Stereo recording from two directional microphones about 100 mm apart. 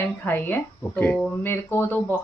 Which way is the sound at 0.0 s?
20° left (ahead or behind).